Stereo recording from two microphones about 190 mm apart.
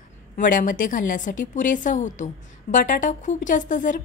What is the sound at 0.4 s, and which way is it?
A woman's voice, 45° left (ahead or behind).